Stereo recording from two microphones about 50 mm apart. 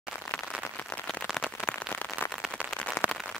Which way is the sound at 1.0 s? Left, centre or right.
Centre.